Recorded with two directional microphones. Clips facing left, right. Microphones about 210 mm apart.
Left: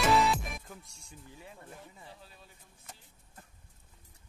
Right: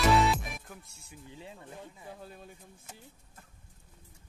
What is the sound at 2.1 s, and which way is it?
Speech, 50° right (ahead or behind).